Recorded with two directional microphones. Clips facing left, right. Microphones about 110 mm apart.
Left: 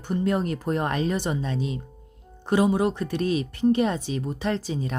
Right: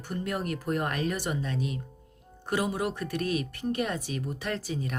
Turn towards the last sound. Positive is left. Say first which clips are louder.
# left 5 dB
turn(degrees=25)  # may be behind; listen again after turning